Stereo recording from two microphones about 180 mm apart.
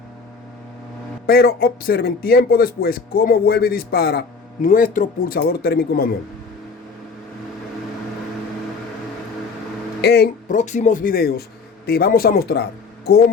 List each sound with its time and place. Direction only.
1.3 s speech: 55° left (ahead or behind)
10.0 s speech: 65° left (ahead or behind)
10.5 s speech: 45° left (ahead or behind); by 13.3 s 65° left (ahead or behind)